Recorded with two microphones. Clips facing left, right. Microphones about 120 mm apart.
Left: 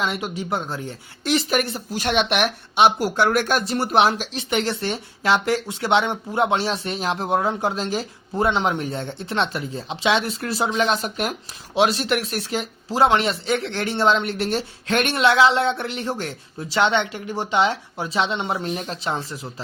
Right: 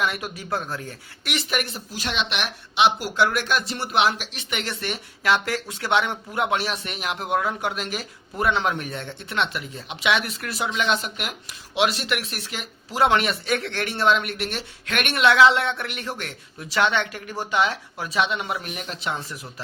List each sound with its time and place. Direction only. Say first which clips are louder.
0.0 s speech: left 2 dB; 25° left (ahead or behind)
1.9 s speech: left 8 dB; 55° left (ahead or behind); by 19.6 s 25° left (ahead or behind)